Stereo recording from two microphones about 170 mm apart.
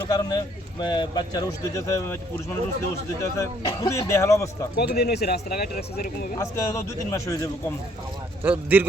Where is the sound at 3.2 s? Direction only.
15° left (ahead or behind).